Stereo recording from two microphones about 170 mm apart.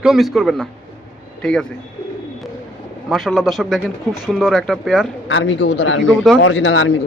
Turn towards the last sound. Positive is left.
turn(degrees=90)